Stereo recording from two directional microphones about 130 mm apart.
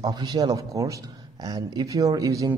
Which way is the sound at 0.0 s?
30° right (ahead or behind).